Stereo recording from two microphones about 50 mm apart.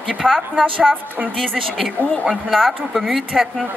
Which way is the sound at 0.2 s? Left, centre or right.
Centre.